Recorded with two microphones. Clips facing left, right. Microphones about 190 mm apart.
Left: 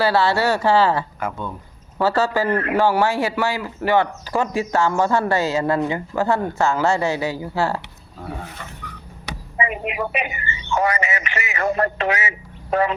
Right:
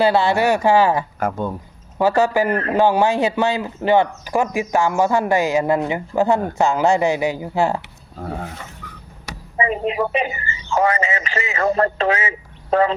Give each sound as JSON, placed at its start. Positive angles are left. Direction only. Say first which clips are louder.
{"t": 0.0, "sound": "speech", "louder": "right 2 dB", "side_deg": -20}
{"t": 1.2, "sound": "speech", "louder": "right 5 dB", "side_deg": -40}
{"t": 2.0, "sound": "speech", "louder": "right 3 dB", "side_deg": -15}
{"t": 9.6, "sound": "speech", "louder": "right 4 dB", "side_deg": -30}